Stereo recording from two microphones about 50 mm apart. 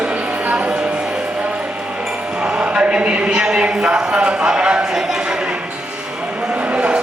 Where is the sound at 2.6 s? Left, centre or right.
Right.